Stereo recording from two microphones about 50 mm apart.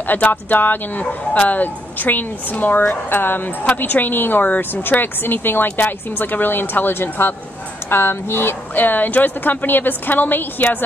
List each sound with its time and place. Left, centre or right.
0.3 s speech: left
8.7 s speech: left